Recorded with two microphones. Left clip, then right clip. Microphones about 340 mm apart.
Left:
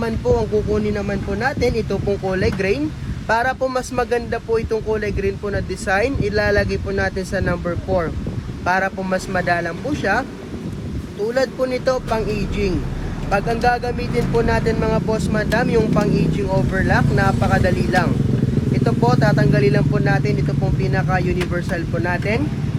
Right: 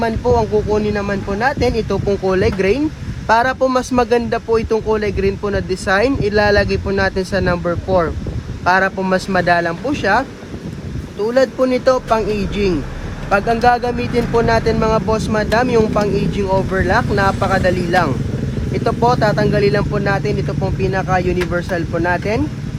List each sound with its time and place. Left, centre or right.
0.0 s speech: right
11.3 s speech: right